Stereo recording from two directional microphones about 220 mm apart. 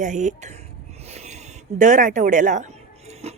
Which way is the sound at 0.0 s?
35° right (ahead or behind).